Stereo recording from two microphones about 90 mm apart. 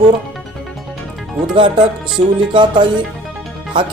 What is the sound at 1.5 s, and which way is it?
Speech, 65° right (ahead or behind).